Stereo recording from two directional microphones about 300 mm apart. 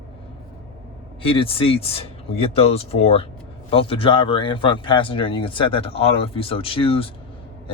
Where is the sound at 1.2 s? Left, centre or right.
Centre.